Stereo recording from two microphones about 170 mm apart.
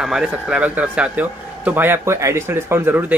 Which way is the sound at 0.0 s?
5° right (ahead or behind).